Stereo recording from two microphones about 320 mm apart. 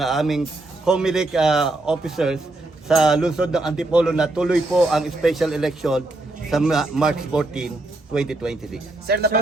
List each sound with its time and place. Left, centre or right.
0.0 s a man's voice: centre
9.0 s speech: right